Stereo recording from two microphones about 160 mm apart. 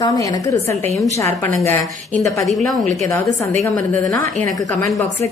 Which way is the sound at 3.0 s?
20° left (ahead or behind).